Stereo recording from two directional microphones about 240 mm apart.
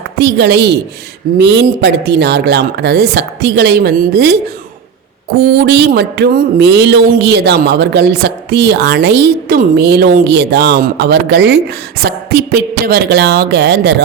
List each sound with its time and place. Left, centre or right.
0.2 s speech: right
5.5 s speech: right